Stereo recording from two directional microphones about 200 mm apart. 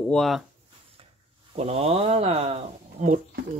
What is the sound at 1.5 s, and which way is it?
Speech, 30° right (ahead or behind).